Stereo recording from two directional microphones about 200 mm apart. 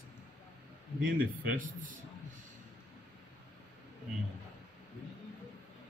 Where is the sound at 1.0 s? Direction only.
45° right (ahead or behind).